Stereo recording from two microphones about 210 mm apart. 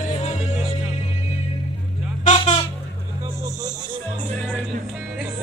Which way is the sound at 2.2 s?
30° left (ahead or behind).